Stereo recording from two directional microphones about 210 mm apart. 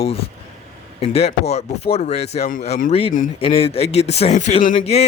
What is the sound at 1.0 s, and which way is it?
Speech, 30° left (ahead or behind).